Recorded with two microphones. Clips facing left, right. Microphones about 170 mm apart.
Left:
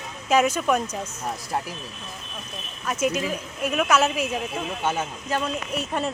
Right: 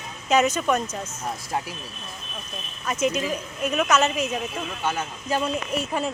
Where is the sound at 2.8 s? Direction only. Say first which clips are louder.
Even; 5° left (ahead or behind).